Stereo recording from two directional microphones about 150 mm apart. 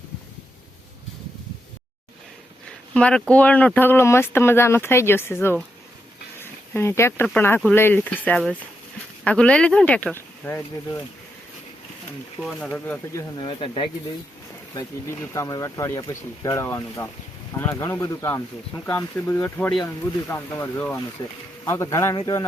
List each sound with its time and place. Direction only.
2.9 s speech: 5° left (ahead or behind)
12.4 s speech: centre (ahead or behind)
12.6 s speech: 10° left (ahead or behind)
13.1 s speech: 30° left (ahead or behind)
15.2 s speech: 20° left (ahead or behind)
21.2 s speech: 30° left (ahead or behind)